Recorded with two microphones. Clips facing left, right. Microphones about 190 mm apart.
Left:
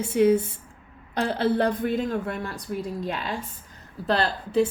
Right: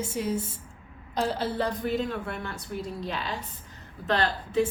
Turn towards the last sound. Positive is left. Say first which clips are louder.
# left 3 dB
turn(degrees=35)  # may be behind; listen again after turning